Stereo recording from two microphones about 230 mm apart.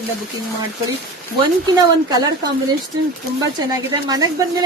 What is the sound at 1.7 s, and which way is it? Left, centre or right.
Speech, centre.